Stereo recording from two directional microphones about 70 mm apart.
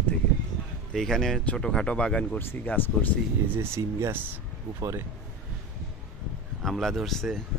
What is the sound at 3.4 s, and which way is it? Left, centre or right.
Speech, right.